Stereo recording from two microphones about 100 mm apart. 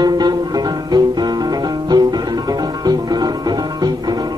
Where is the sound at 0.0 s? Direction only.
45° right (ahead or behind).